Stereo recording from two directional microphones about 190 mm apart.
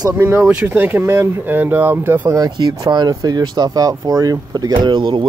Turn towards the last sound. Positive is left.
turn(degrees=-25)  # may be behind; listen again after turning